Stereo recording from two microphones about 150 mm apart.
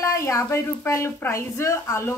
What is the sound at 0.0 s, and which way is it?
Speech, 20° left (ahead or behind).